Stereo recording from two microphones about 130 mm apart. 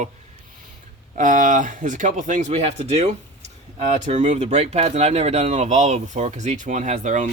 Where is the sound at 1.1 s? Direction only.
85° right.